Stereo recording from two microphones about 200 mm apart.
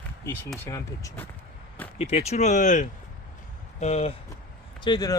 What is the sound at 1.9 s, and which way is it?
Speech, 30° left (ahead or behind).